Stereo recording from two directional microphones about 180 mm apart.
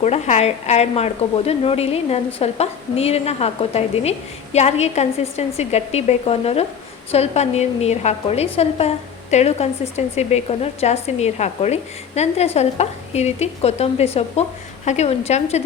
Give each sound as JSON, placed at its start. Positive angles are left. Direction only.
{"t": 0.0, "sound": "a woman's voice", "side_deg": 40}